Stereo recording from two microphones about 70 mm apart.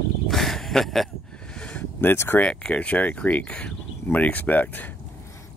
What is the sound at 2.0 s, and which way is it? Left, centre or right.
Speech, left.